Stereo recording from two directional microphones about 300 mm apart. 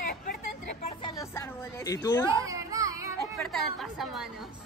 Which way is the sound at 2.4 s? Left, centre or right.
Centre.